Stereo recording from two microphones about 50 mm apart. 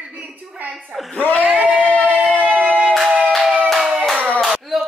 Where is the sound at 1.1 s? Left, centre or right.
Left.